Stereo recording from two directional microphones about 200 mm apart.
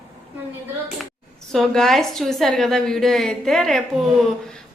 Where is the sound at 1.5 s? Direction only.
Centre (ahead or behind).